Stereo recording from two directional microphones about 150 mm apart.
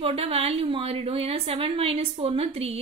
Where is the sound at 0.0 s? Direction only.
40° right (ahead or behind).